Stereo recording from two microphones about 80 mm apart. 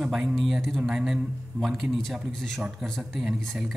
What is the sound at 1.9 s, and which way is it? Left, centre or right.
A man's voice, centre.